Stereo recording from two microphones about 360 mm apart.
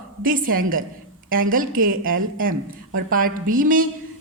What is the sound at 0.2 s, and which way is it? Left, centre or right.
A woman's voice, right.